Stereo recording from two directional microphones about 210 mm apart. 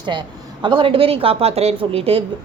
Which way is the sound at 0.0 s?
20° right (ahead or behind).